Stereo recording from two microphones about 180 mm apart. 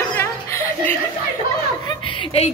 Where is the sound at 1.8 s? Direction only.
30° left (ahead or behind).